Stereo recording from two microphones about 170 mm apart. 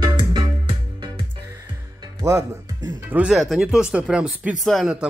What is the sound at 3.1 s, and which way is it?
Speech, 5° right (ahead or behind).